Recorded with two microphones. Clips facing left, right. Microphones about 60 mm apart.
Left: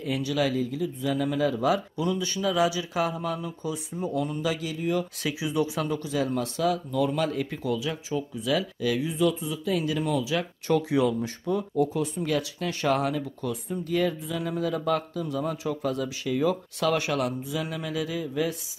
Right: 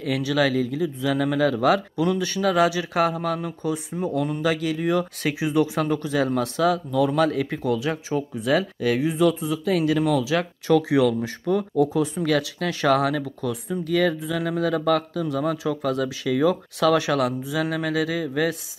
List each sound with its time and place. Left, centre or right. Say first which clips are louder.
0.0 s speech: right 4 dB; right
5.2 s speech: right 5 dB; right
6.1 s speech: right 4 dB; right
11.2 s speech: right 5 dB; right
12.2 s speech: right 5 dB; right